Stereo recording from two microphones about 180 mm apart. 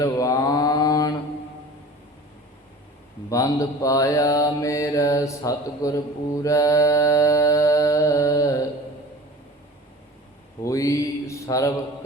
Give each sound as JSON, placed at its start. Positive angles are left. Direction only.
{"t": 0.0, "sound": "mantra", "side_deg": 20}
{"t": 3.2, "sound": "mantra", "side_deg": 20}
{"t": 10.6, "sound": "mantra", "side_deg": 15}